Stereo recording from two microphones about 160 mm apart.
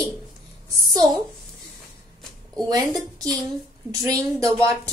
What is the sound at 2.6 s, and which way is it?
Speech, 25° right (ahead or behind).